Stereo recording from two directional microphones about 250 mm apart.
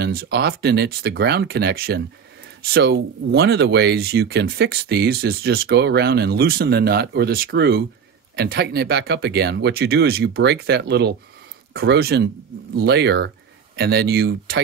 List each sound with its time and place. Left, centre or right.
0.0 s speech: right